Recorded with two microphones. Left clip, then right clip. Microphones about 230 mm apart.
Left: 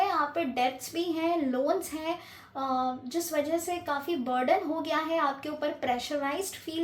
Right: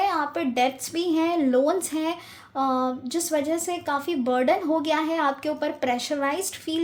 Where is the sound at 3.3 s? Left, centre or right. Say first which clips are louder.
Right 4 dB; right.